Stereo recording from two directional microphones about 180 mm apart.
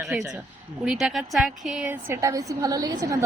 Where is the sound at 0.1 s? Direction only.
5° right (ahead or behind).